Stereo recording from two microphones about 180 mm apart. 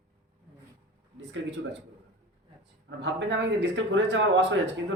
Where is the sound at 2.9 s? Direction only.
80° right.